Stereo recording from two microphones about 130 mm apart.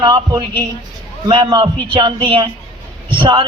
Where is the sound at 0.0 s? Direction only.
35° right (ahead or behind).